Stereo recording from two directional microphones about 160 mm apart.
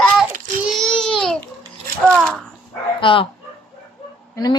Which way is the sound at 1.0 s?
5° left (ahead or behind).